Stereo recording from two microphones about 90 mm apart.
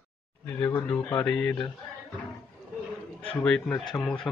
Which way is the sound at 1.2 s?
10° left (ahead or behind).